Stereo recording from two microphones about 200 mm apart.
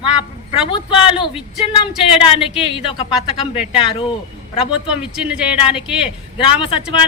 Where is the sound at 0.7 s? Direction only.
25° left (ahead or behind).